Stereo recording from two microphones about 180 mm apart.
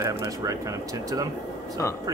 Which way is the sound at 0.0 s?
15° right (ahead or behind).